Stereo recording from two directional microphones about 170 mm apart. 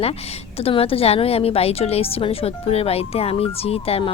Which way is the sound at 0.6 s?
35° left (ahead or behind).